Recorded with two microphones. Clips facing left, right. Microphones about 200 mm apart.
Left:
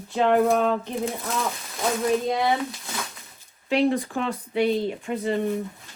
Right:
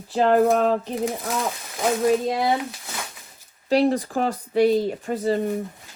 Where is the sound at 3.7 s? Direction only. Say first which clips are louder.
Right 2 dB; 35° right (ahead or behind).